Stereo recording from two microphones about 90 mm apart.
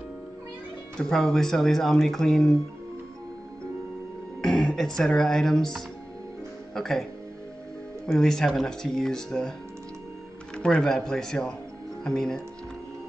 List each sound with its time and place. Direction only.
0.9 s speech: 5° left (ahead or behind)
4.4 s speech: 5° left (ahead or behind)
6.7 s speech: 5° left (ahead or behind)
8.1 s speech: 5° left (ahead or behind)
10.5 s speech: 10° left (ahead or behind)